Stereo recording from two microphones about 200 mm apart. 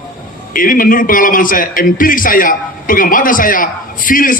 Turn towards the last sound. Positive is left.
turn(degrees=45)  # may be behind; listen again after turning